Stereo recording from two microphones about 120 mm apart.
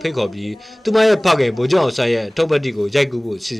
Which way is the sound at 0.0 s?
Centre (ahead or behind).